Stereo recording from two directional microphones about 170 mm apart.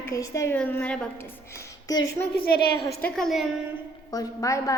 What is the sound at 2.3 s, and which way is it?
Speech, 65° left (ahead or behind).